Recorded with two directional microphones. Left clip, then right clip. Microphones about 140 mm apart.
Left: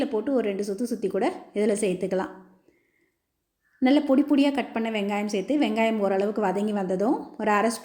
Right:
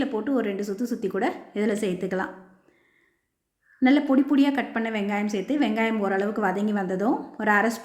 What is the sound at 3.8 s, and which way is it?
A woman's voice, 20° left (ahead or behind).